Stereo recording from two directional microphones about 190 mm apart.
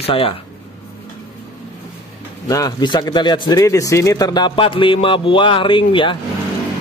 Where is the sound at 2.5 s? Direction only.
20° left (ahead or behind).